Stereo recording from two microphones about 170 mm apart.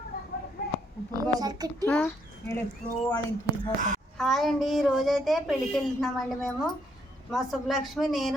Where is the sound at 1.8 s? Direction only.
5° left (ahead or behind).